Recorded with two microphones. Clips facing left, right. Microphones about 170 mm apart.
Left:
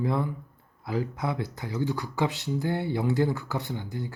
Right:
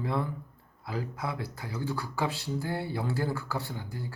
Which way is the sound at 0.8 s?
25° left (ahead or behind).